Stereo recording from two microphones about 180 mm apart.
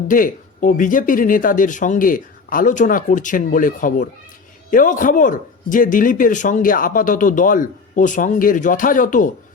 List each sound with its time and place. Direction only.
0.1 s a man's voice: 50° left (ahead or behind)